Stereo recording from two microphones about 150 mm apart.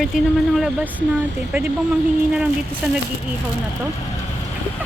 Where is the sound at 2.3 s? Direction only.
5° right (ahead or behind).